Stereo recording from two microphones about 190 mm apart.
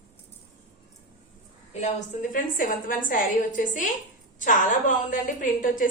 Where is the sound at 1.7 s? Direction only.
40° left (ahead or behind).